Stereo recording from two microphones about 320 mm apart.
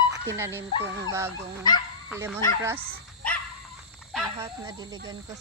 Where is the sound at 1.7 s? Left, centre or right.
Centre.